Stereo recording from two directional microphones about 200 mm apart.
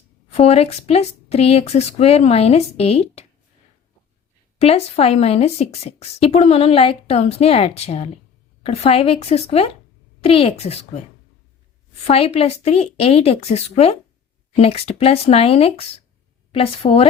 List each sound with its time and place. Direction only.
0.3 s a woman's voice: 30° left (ahead or behind)
4.5 s a woman's voice: 30° left (ahead or behind)
12.0 s a woman's voice: 30° left (ahead or behind)